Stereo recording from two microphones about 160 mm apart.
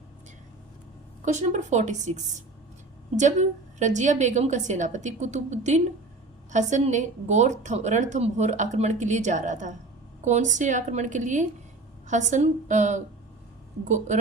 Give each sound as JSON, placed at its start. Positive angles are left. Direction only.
{"t": 1.2, "sound": "a woman's voice", "side_deg": -45}